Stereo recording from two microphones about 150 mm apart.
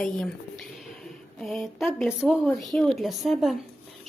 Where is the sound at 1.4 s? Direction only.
5° left (ahead or behind).